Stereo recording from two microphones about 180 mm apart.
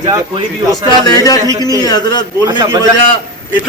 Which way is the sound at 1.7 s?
20° left (ahead or behind).